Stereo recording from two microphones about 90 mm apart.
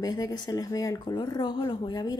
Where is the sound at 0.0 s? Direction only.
45° left (ahead or behind).